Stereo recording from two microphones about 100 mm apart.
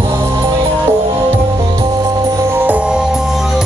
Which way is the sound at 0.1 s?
30° right (ahead or behind).